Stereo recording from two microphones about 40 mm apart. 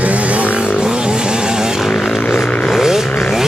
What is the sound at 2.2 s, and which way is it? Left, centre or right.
Vehicle, left.